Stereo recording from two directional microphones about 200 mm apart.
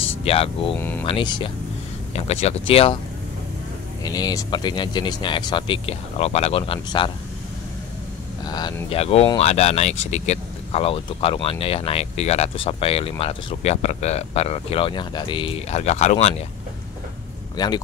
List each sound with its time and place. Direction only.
0.2 s speech: 30° left (ahead or behind)
0.7 s speech: 10° left (ahead or behind)
1.0 s speech: 25° left (ahead or behind)
4.0 s speech: 20° left (ahead or behind)
8.5 s speech: 20° left (ahead or behind)
17.6 s speech: 20° left (ahead or behind)